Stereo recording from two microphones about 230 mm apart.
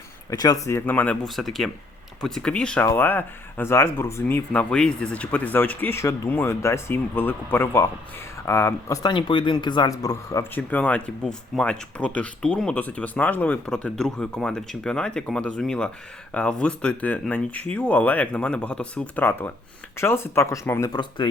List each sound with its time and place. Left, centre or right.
0.3 s speech: centre